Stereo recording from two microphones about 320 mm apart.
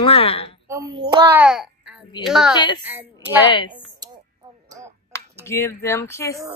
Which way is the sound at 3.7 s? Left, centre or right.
Centre.